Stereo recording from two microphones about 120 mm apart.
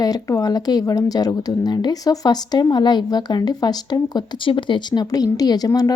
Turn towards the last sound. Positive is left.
turn(degrees=30)  # may be behind; listen again after turning